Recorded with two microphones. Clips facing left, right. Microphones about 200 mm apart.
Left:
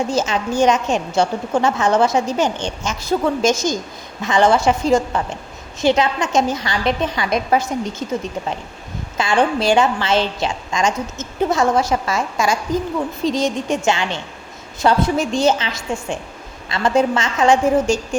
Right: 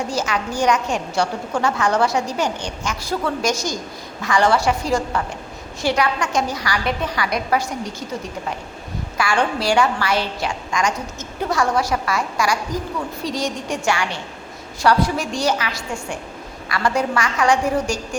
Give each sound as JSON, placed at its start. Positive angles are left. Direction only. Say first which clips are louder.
{"t": 0.1, "sound": "a woman's voice", "louder": "left 4 dB", "side_deg": 20}
{"t": 9.1, "sound": "a woman's voice", "louder": "left 3 dB", "side_deg": 20}